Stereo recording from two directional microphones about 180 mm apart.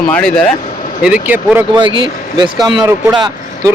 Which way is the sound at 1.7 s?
25° right (ahead or behind).